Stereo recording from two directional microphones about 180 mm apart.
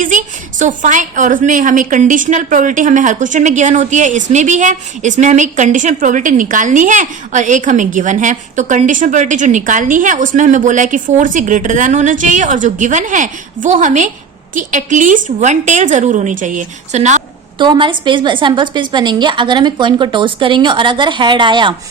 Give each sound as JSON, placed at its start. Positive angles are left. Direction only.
{"t": 0.0, "sound": "a woman's voice", "side_deg": -45}
{"t": 17.6, "sound": "a woman's voice", "side_deg": -25}